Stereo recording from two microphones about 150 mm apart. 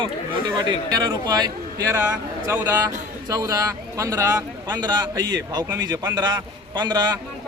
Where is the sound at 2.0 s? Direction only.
15° right (ahead or behind).